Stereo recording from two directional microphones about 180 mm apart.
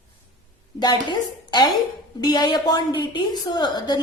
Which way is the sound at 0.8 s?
25° left (ahead or behind).